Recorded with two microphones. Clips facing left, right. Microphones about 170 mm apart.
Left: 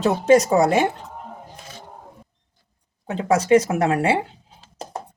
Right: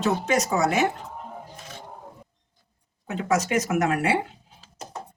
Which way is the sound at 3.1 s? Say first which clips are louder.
Left 7 dB; 30° left (ahead or behind).